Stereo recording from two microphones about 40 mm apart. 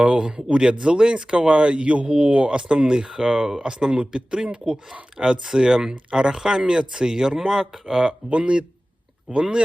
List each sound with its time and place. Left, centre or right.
0.0 s speech: right
7.9 s speech: right